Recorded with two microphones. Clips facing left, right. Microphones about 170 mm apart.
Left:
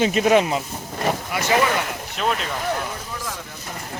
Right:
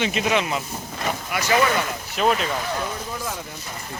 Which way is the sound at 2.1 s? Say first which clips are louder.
Right 3 dB; centre (ahead or behind).